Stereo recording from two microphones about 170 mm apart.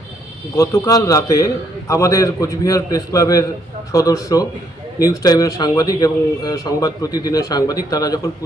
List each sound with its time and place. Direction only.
0.5 s a man's voice: 20° left (ahead or behind)